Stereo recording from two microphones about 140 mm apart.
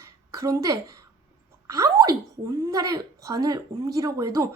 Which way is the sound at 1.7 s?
25° right (ahead or behind).